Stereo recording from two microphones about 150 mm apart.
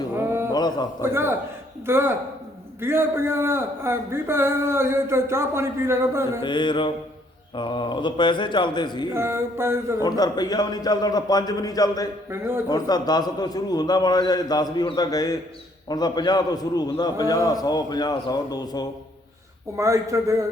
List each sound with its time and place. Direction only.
0.2 s a sound: 15° right (ahead or behind)
0.5 s a sound: 30° left (ahead or behind)
1.0 s a man's voice: 15° right (ahead or behind)
6.4 s a man's voice: 30° left (ahead or behind)
9.1 s a man's voice: 15° right (ahead or behind)
10.0 s a man's voice: 25° left (ahead or behind)
12.3 s a man's voice: 15° right (ahead or behind)
12.6 s a man's voice: 25° left (ahead or behind)
19.7 s speech: 20° right (ahead or behind)